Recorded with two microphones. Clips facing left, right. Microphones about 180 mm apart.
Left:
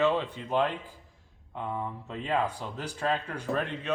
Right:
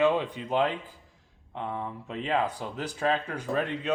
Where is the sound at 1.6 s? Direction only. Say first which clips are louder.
Even; 5° left (ahead or behind).